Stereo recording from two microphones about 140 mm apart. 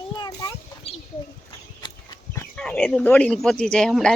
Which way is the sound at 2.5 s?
5° left (ahead or behind).